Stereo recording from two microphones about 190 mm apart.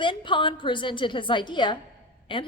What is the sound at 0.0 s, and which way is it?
A woman's voice, 25° left (ahead or behind).